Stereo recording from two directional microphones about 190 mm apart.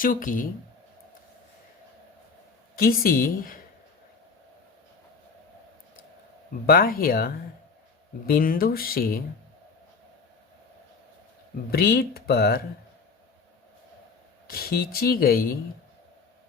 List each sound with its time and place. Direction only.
0.0 s speech: 45° left (ahead or behind)
2.7 s speech: 50° left (ahead or behind)
6.7 s speech: 50° left (ahead or behind)
11.7 s speech: 50° left (ahead or behind)
14.4 s speech: 50° left (ahead or behind)